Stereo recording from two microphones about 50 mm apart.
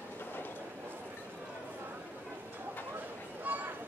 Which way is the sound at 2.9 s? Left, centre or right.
Right.